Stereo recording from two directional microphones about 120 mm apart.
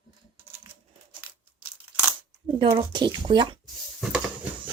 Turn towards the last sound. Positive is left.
turn(degrees=0)  # may be behind; listen again after turning